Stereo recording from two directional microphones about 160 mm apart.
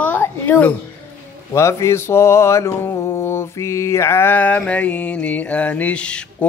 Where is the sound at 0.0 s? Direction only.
10° left (ahead or behind).